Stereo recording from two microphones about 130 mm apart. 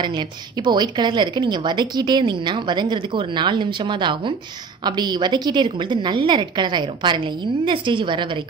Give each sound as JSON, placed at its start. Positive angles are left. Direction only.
{"t": 0.7, "sound": "a woman's voice", "side_deg": -35}